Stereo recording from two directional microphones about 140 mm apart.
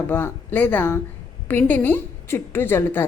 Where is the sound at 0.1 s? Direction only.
15° left (ahead or behind).